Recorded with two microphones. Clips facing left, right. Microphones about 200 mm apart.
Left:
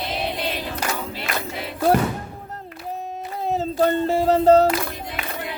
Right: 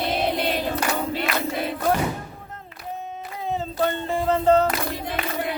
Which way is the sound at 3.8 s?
40° left (ahead or behind).